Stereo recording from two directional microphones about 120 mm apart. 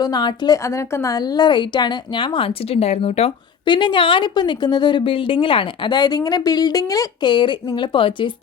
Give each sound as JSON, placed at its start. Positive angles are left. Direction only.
{"t": 0.0, "sound": "a woman's voice", "side_deg": 35}
{"t": 0.6, "sound": "a woman's voice", "side_deg": 25}
{"t": 3.7, "sound": "a woman's voice", "side_deg": 40}